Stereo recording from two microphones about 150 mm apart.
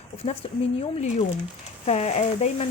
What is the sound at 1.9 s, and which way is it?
Speech, 45° left (ahead or behind).